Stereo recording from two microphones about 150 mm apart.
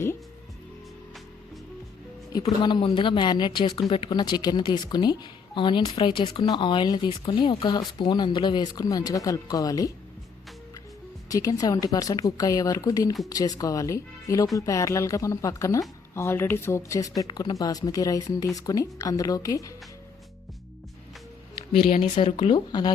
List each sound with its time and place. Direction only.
2.4 s speech: 30° left (ahead or behind)
11.3 s speech: 25° left (ahead or behind)
21.8 s speech: 50° left (ahead or behind)
22.2 s speech: 35° left (ahead or behind)